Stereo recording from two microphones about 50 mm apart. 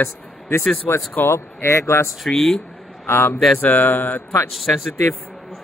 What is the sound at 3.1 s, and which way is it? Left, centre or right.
Speech, left.